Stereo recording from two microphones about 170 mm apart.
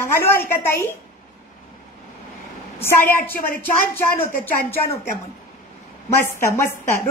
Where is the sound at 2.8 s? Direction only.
10° left (ahead or behind).